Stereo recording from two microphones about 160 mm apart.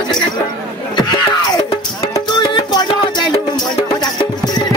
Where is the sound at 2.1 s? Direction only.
25° left (ahead or behind).